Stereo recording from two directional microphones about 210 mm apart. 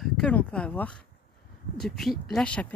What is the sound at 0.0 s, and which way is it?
Speech, 5° left (ahead or behind).